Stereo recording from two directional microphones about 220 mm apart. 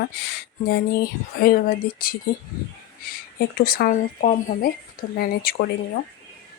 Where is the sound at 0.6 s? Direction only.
45° left (ahead or behind).